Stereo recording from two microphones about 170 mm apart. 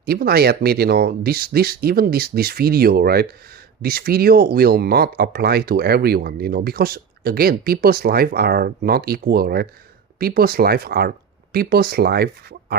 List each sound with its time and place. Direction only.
0.0 s speech: 65° right (ahead or behind)